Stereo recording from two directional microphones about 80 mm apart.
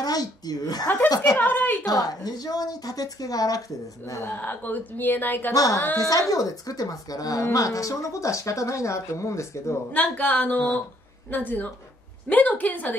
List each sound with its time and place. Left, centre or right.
0.0 s a woman's voice: left
1.4 s a woman's voice: left
1.9 s a woman's voice: left
4.0 s a woman's voice: left
5.5 s a woman's voice: left
9.9 s a woman's voice: centre